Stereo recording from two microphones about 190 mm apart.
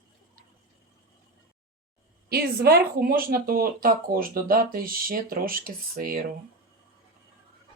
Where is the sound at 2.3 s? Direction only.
55° right (ahead or behind).